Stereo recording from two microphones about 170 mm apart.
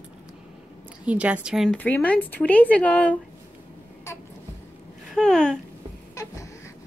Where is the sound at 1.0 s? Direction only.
10° right (ahead or behind); by 3.2 s 10° left (ahead or behind).